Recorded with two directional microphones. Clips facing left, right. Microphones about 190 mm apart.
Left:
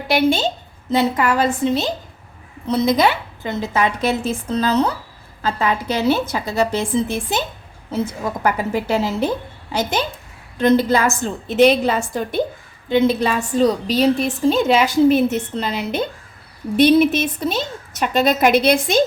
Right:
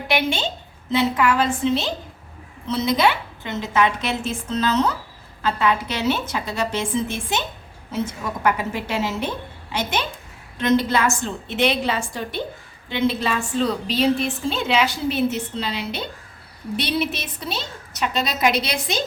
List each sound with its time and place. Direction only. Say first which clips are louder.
0.1 s a woman's voice: left 6 dB; 40° left (ahead or behind)